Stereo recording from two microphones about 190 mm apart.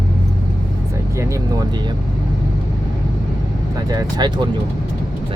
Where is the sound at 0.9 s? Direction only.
15° right (ahead or behind).